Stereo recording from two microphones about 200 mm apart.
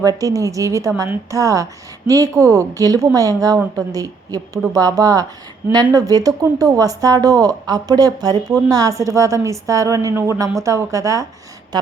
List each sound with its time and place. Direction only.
0.0 s a woman's voice: 15° right (ahead or behind)